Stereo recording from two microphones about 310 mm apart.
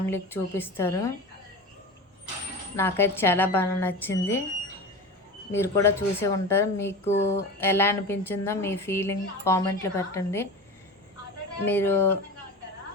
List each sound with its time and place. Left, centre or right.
0.0 s a woman's voice: centre
2.7 s a woman's voice: centre
5.5 s a woman's voice: centre
7.0 s a sound: left
7.6 s a woman's voice: centre
11.6 s a woman's voice: centre